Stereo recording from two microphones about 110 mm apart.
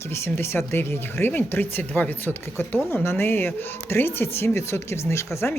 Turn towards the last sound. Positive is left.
turn(degrees=25)  # may be behind; listen again after turning